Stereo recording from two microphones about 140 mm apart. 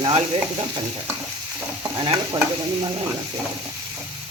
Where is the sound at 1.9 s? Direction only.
30° right (ahead or behind).